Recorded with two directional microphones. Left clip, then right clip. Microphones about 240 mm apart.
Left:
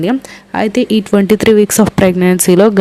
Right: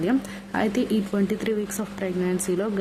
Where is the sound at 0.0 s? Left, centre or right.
Left.